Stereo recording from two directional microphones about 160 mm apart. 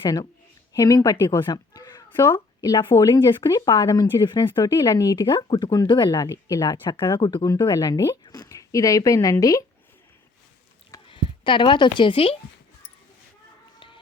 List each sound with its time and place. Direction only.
0.0 s a woman's voice: 25° left (ahead or behind)
4.3 s speech: 30° left (ahead or behind)
10.9 s speech: 30° left (ahead or behind)
13.7 s music: 30° left (ahead or behind)